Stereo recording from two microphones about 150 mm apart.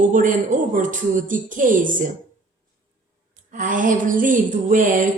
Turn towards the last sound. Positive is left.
turn(degrees=-60)  # may be behind; listen again after turning